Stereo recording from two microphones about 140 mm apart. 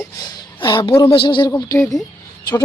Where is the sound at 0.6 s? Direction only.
35° left (ahead or behind).